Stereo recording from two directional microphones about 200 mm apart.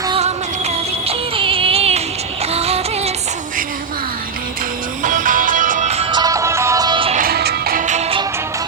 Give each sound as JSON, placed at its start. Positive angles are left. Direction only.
{"t": 0.1, "sound": "music", "side_deg": -30}
{"t": 5.0, "sound": "music", "side_deg": -40}
{"t": 7.2, "sound": "music", "side_deg": -50}